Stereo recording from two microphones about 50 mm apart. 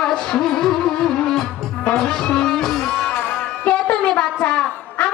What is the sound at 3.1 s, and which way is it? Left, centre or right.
Music, left.